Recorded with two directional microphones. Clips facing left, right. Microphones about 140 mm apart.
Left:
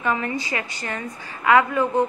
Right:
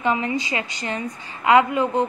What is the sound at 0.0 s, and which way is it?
A woman's voice, 20° right (ahead or behind).